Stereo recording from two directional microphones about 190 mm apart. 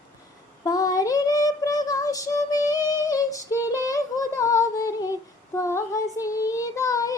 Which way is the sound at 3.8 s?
15° left (ahead or behind).